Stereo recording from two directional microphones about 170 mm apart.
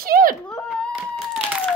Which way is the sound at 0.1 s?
60° right (ahead or behind).